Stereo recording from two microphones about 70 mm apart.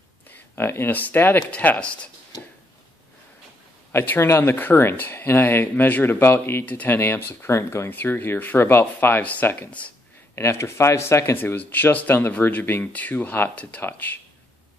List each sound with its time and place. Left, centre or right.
0.3 s speech: left; by 2.0 s centre
4.0 s speech: left
6.6 s speech: left
7.9 s speech: left
10.3 s speech: left
11.3 s speech: left